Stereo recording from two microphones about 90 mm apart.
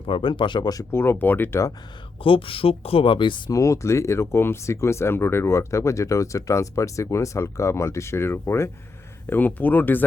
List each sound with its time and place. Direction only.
0.0 s speech: 75° left (ahead or behind)
0.7 s speech: 40° left (ahead or behind)
0.9 s speech: 25° left (ahead or behind)
2.2 s speech: 90° left; by 3.5 s 65° left (ahead or behind)
3.5 s speech: 35° left (ahead or behind); by 10.0 s 20° left (ahead or behind)